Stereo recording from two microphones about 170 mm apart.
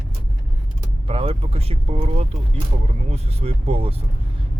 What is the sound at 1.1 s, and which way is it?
Speech, 35° right (ahead or behind).